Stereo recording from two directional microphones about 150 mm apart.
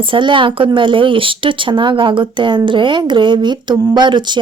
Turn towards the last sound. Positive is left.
turn(degrees=-30)  # may be behind; listen again after turning